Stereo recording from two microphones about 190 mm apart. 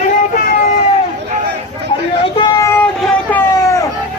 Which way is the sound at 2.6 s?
5° left (ahead or behind).